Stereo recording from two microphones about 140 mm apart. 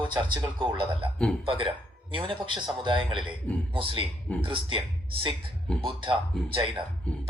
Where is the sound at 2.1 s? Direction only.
40° right (ahead or behind).